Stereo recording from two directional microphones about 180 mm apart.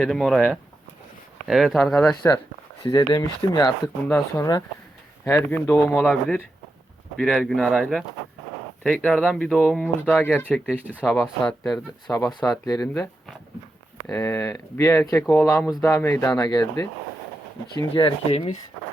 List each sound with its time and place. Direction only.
0.0 s speech: centre (ahead or behind)
2.8 s speech: 20° left (ahead or behind)
10.5 s speech: 5° right (ahead or behind)
12.6 s speech: 20° left (ahead or behind)
14.1 s speech: 15° left (ahead or behind); by 18.5 s 35° left (ahead or behind)